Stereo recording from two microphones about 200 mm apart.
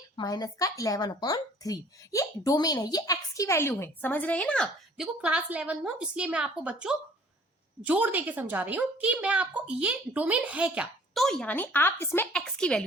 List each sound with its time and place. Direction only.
0.2 s a woman's voice: 20° left (ahead or behind)